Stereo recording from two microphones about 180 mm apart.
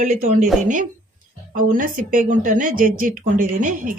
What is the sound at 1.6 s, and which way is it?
Speech, 50° right (ahead or behind).